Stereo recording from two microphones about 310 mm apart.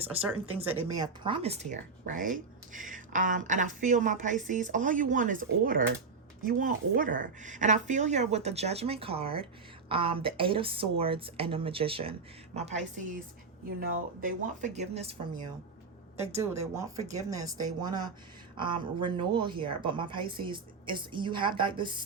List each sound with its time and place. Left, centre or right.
0.1 s speech: centre
0.3 s a woman's voice: centre
16.4 s a woman's voice: centre